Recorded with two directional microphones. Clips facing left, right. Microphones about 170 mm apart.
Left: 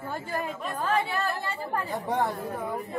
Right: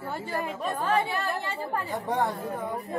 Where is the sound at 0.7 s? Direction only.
25° right (ahead or behind).